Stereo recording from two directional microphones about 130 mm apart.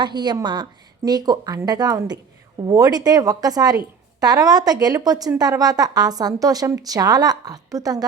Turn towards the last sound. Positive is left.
turn(degrees=-25)  # may be behind; listen again after turning